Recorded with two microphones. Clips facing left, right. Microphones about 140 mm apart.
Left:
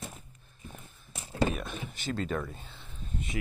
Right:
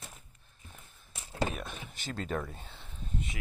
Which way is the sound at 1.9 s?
35° right (ahead or behind).